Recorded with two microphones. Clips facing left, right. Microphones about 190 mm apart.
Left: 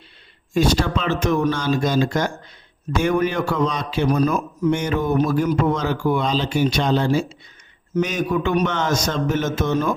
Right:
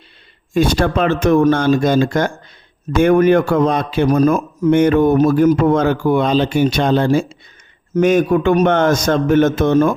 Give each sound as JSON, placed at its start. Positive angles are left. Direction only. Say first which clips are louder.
{"t": 0.5, "sound": "a man's voice", "louder": "right 4 dB", "side_deg": -55}